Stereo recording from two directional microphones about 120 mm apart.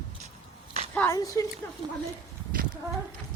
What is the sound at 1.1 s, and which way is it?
Speech, 30° left (ahead or behind).